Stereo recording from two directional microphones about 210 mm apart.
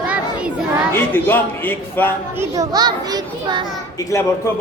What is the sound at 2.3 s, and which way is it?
A child's voice, 15° right (ahead or behind).